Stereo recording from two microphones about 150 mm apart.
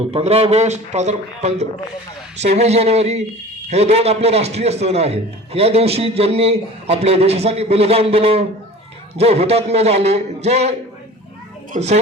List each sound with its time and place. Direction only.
0.0 s a man's voice: 40° right (ahead or behind)